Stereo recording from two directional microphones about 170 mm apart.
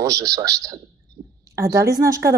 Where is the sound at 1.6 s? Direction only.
20° right (ahead or behind).